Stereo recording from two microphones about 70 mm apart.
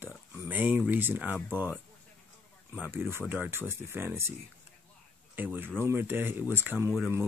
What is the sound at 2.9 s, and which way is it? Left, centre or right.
Speech, right.